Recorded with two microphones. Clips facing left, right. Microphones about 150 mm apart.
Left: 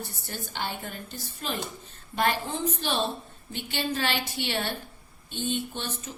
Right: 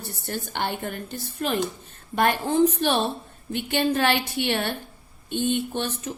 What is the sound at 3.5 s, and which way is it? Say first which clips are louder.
A woman's voice: right 8 dB; 55° right (ahead or behind).